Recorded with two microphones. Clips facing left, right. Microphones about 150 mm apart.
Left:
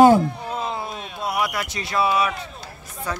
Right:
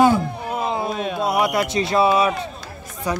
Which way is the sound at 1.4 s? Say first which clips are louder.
Right 7 dB; 25° right (ahead or behind).